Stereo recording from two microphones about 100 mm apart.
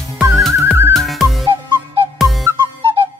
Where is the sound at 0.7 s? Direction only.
25° right (ahead or behind).